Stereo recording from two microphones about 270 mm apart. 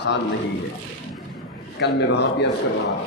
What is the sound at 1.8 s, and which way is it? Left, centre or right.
Speech, left.